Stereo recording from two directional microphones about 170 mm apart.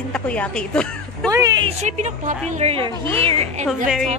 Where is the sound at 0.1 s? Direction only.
5° left (ahead or behind).